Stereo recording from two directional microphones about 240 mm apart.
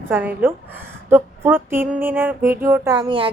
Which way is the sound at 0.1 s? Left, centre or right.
Centre.